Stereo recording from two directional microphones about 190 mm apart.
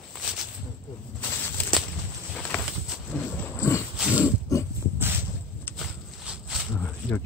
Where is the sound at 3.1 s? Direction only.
15° left (ahead or behind).